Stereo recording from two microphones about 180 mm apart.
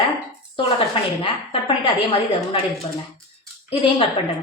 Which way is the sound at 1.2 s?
30° left (ahead or behind).